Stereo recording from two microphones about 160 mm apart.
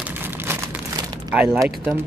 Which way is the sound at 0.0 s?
15° right (ahead or behind).